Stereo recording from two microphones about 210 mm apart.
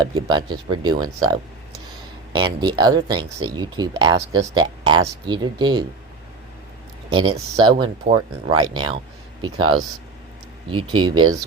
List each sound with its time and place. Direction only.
0.0 s speech: 20° right (ahead or behind)
7.1 s speech: 25° right (ahead or behind)